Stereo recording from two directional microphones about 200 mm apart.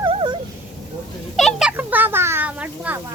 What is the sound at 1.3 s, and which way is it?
A child's voice, centre (ahead or behind).